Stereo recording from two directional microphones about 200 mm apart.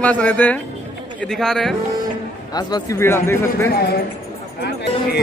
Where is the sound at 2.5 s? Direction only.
20° left (ahead or behind).